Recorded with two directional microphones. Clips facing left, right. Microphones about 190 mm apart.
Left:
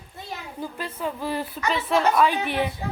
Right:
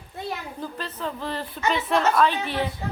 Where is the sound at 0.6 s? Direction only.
10° left (ahead or behind).